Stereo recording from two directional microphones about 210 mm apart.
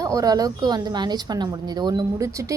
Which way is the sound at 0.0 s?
15° right (ahead or behind).